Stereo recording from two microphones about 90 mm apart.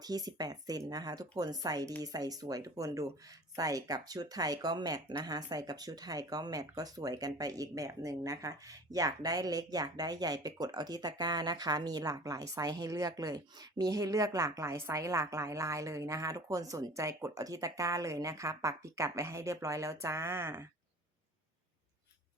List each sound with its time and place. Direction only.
0.0 s speech: 45° right (ahead or behind); by 20.7 s 25° right (ahead or behind)